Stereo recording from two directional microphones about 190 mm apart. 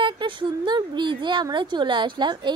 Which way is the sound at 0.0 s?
25° right (ahead or behind).